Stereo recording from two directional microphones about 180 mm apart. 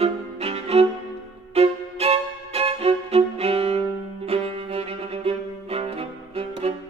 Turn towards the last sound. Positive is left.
turn(degrees=-35)  # may be behind; listen again after turning